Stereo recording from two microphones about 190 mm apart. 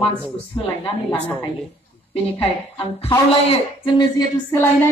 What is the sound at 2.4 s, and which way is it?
A woman's voice, 30° left (ahead or behind).